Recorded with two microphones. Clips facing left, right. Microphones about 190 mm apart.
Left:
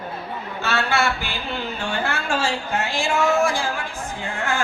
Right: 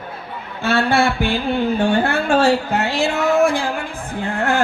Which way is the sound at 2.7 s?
65° right (ahead or behind).